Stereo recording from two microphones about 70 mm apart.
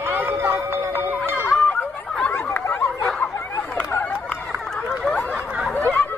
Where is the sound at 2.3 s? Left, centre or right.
Left.